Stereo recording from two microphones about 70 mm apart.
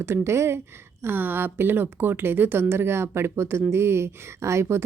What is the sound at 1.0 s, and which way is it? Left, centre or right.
A woman's voice, right.